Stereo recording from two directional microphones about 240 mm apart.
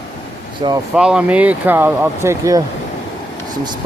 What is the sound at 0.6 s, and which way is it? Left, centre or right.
Speech, centre.